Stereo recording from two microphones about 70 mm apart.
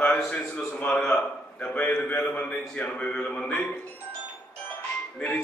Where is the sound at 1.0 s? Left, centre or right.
Centre.